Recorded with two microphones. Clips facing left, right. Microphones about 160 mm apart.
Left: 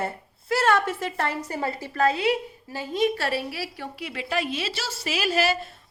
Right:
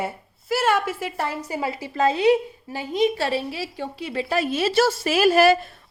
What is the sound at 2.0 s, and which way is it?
A woman's voice, 25° right (ahead or behind).